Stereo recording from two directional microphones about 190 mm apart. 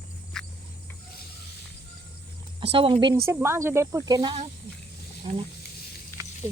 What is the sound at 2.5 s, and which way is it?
Speech, 30° right (ahead or behind).